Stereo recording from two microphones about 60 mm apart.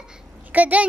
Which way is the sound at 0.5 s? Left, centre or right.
Right.